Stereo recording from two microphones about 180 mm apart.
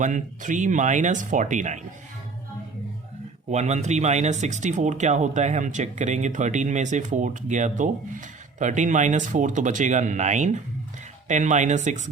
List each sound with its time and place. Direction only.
0.0 s speech: 45° right (ahead or behind)
3.5 s speech: 40° right (ahead or behind)